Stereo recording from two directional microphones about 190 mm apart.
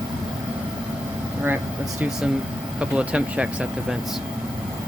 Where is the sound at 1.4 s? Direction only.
10° right (ahead or behind).